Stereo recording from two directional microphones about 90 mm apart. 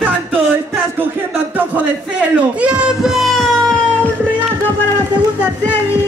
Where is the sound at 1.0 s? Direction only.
20° right (ahead or behind); by 3.7 s 5° left (ahead or behind).